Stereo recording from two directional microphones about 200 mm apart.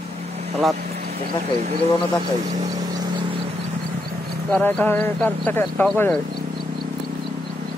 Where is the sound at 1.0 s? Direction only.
50° right (ahead or behind).